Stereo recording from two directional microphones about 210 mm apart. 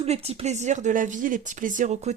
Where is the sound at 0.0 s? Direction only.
30° right (ahead or behind).